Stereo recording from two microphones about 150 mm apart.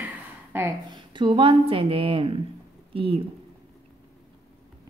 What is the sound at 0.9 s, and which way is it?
Speech, 35° right (ahead or behind).